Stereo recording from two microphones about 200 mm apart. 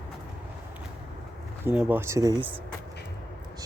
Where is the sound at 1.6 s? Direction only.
5° right (ahead or behind).